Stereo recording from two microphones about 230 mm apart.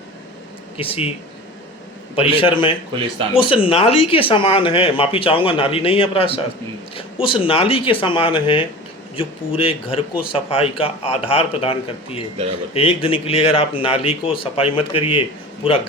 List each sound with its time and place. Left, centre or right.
0.8 s speech: left
2.1 s speech: left